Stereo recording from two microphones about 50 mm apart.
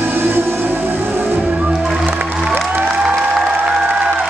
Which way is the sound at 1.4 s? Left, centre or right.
Centre.